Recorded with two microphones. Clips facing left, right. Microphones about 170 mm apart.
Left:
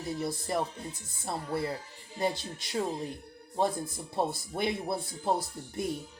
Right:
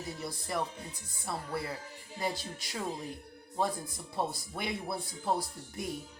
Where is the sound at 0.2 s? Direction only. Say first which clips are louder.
Left 3 dB; 25° left (ahead or behind).